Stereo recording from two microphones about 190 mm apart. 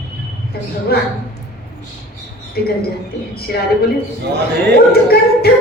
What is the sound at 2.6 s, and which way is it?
Speech, 55° left (ahead or behind).